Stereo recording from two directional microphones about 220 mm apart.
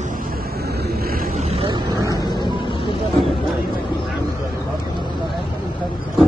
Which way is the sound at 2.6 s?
20° left (ahead or behind).